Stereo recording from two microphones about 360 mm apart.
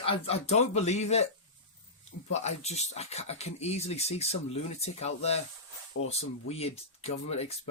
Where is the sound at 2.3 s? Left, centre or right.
Centre.